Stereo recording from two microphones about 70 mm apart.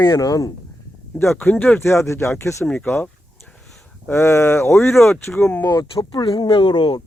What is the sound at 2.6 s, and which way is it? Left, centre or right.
Speech, centre.